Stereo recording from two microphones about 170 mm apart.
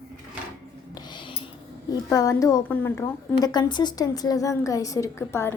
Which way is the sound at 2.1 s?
20° left (ahead or behind).